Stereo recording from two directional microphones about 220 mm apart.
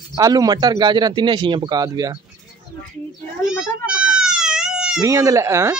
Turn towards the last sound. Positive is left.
turn(degrees=-10)  # may be behind; listen again after turning